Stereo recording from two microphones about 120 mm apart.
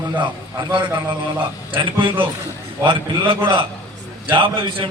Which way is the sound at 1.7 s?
45° right (ahead or behind).